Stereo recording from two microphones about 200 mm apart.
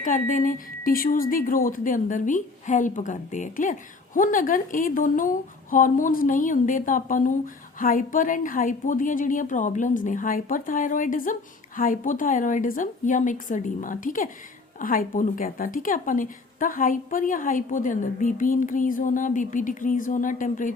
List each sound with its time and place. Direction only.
0.0 s speech: 40° left (ahead or behind)